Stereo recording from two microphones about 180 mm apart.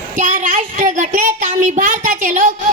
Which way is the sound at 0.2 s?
45° right (ahead or behind).